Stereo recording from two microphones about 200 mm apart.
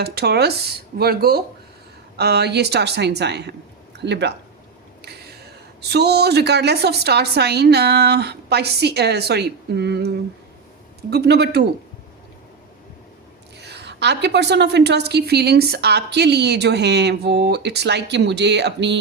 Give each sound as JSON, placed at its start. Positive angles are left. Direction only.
{"t": 0.0, "sound": "a woman's voice", "side_deg": -55}
{"t": 5.9, "sound": "a woman's voice", "side_deg": -55}
{"t": 11.1, "sound": "a woman's voice", "side_deg": -55}
{"t": 13.6, "sound": "a woman's voice", "side_deg": -55}